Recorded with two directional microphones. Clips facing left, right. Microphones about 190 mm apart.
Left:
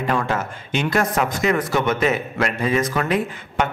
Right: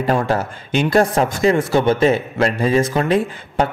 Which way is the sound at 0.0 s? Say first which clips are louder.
Right 4 dB; 35° right (ahead or behind).